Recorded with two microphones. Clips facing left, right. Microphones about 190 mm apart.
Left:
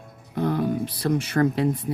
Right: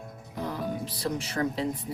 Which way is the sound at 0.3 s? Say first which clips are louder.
Left 9 dB; 60° left (ahead or behind).